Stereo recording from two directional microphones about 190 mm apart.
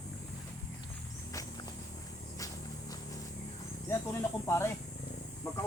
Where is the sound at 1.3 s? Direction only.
20° left (ahead or behind).